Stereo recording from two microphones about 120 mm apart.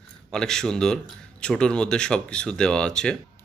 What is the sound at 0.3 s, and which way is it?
A man's voice, 5° left (ahead or behind).